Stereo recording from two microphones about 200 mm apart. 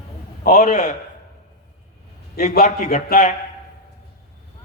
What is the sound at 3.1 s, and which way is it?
Speech, 40° left (ahead or behind).